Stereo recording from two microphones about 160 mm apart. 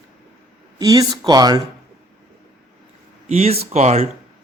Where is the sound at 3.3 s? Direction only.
40° right (ahead or behind).